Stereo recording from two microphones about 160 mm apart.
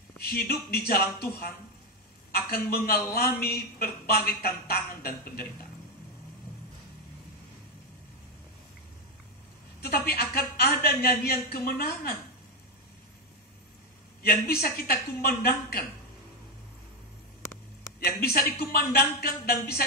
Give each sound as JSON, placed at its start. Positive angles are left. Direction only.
{"t": 0.2, "sound": "a woman's voice", "side_deg": 75}
{"t": 9.8, "sound": "a woman's voice", "side_deg": 75}
{"t": 14.2, "sound": "a woman's voice", "side_deg": 70}
{"t": 18.0, "sound": "a woman's voice", "side_deg": 70}